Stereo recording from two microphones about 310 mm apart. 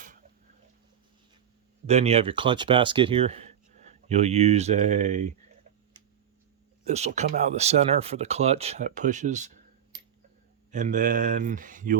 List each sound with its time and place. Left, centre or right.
0.0 s a sound: right
1.9 s speech: right
6.8 s speech: right